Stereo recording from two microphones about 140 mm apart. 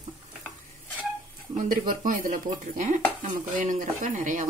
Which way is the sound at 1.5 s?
75° right (ahead or behind).